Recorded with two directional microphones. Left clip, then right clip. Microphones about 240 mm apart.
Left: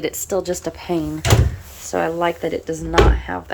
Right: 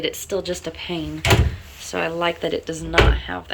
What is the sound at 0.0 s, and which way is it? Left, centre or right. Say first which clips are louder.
A woman's voice: left 2 dB; centre.